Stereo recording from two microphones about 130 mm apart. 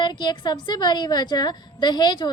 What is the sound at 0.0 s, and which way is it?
A woman's voice, 35° left (ahead or behind).